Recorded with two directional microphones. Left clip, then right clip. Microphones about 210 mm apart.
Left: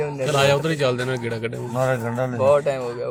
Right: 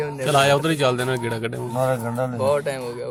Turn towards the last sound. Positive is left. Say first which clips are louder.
# left 4 dB
turn(degrees=20)  # may be behind; listen again after turning